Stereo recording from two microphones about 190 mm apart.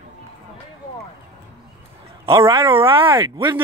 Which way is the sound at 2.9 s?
25° right (ahead or behind).